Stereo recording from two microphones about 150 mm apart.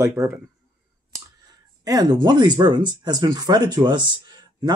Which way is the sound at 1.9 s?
25° right (ahead or behind).